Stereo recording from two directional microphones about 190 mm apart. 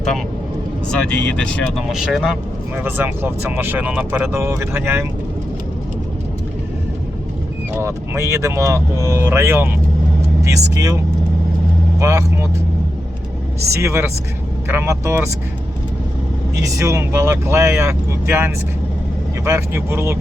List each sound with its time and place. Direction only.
1.4 s speech: 5° left (ahead or behind); by 5.0 s 15° right (ahead or behind)
7.8 s speech: 15° right (ahead or behind)
13.7 s speech: 15° right (ahead or behind)
16.6 s speech: 15° right (ahead or behind)